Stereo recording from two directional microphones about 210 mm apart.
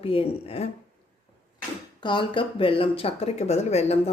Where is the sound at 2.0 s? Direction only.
20° left (ahead or behind).